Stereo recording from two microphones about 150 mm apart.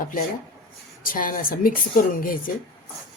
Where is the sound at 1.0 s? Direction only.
65° left (ahead or behind).